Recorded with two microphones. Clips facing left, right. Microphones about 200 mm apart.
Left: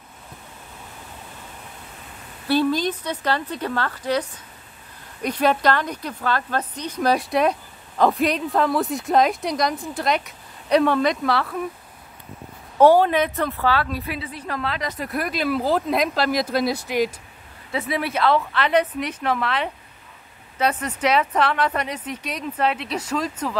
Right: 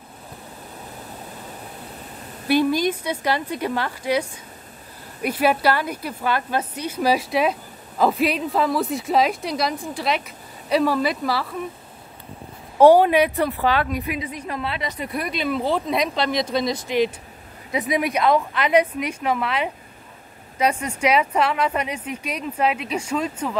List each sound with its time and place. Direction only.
2.4 s a woman's voice: 15° right (ahead or behind)
12.7 s a woman's voice: 15° right (ahead or behind)
14.1 s a woman's voice: 35° left (ahead or behind)
14.4 s a woman's voice: 5° right (ahead or behind)
17.6 s a woman's voice: 15° right (ahead or behind)